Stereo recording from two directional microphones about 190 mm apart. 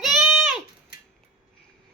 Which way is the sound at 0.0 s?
Centre (ahead or behind).